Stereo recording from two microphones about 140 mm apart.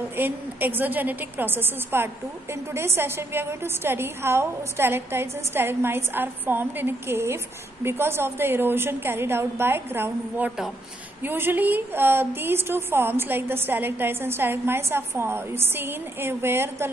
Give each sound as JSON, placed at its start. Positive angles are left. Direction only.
{"t": 0.1, "sound": "a woman's voice", "side_deg": -15}